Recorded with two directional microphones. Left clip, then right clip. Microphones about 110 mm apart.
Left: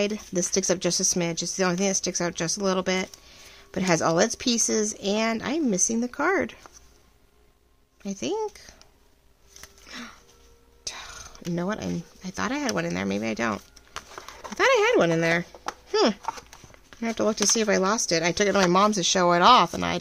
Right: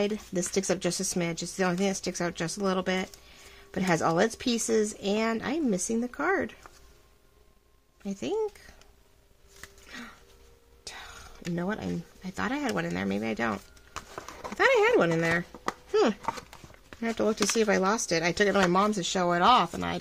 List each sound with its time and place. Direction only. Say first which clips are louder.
0.0 s speech: left 3 dB; 35° left (ahead or behind); by 6.6 s 55° left (ahead or behind)
8.0 s speech: left 2 dB; 45° left (ahead or behind)
9.6 s a sound: left 3 dB; 45° left (ahead or behind)
10.8 s whispering: left 6 dB; 40° left (ahead or behind)
12.7 s speech: left 3 dB; 40° left (ahead or behind)
13.6 s a sound: left 2 dB; 45° left (ahead or behind)
14.2 s horse: left 1 dB; 30° left (ahead or behind)
14.6 s speech: left 2 dB; 45° left (ahead or behind)
16.3 s a sound: left 1 dB; 25° left (ahead or behind)
17.0 s speech: left 3 dB; 40° left (ahead or behind); by 20.0 s 65° left (ahead or behind)